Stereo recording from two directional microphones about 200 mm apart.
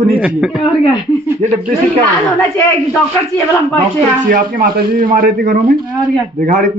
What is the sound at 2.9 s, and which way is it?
Speech, 10° left (ahead or behind).